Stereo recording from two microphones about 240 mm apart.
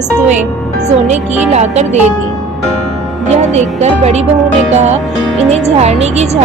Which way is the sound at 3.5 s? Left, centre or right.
Right.